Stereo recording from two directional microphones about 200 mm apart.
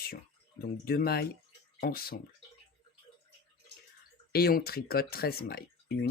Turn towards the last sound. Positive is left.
turn(degrees=50)  # may be behind; listen again after turning